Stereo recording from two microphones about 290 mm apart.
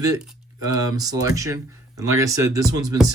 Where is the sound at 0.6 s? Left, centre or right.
Centre.